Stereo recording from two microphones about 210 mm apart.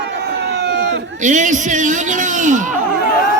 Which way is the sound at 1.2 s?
35° right (ahead or behind).